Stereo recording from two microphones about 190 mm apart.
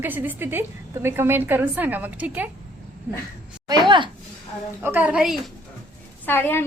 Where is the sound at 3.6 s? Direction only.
20° right (ahead or behind).